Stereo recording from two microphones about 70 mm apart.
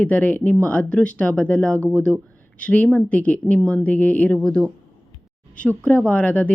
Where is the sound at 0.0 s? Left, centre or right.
Left.